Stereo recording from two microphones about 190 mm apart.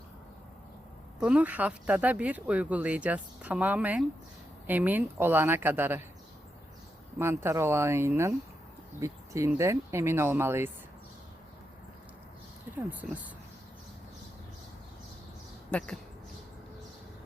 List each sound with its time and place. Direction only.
1.2 s speech: 5° right (ahead or behind)
7.2 s speech: 15° right (ahead or behind)
12.7 s speech: 10° right (ahead or behind)
15.7 s speech: 5° left (ahead or behind)